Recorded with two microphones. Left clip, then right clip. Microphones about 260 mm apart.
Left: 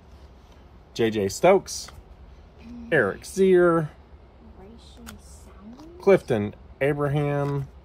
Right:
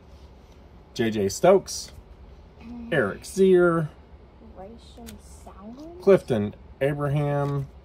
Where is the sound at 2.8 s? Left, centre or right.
Centre.